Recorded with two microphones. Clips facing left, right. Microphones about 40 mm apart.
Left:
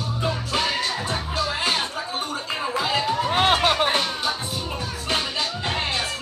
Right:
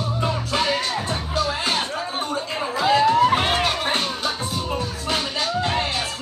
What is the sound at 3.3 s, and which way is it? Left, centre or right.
Music, left.